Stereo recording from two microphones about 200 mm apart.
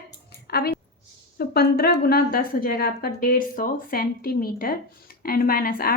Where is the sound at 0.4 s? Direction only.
50° left (ahead or behind).